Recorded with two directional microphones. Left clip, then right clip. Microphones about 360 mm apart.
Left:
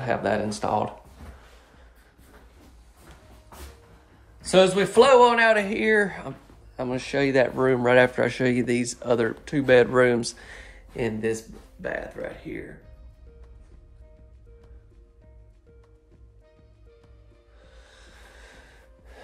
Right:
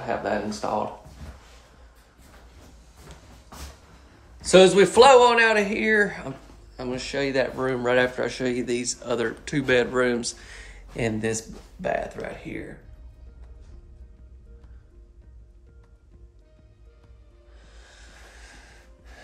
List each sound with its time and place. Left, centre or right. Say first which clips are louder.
0.0 s speech: left 2 dB; left
4.4 s a man's voice: right 4 dB; centre
17.6 s music: right 1 dB; centre